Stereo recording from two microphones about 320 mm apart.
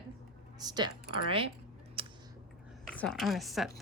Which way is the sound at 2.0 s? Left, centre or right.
Centre.